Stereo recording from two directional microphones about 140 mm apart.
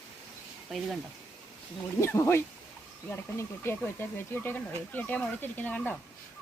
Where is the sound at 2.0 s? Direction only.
20° left (ahead or behind).